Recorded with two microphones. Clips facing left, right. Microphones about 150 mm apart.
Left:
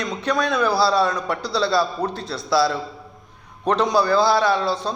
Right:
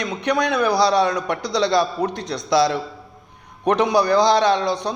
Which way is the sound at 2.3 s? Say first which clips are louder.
Right 2 dB; 20° right (ahead or behind).